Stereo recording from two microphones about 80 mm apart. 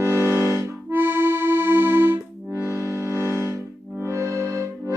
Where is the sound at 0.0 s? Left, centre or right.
Right.